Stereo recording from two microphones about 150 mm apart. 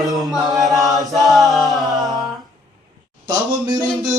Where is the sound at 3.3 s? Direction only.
25° right (ahead or behind).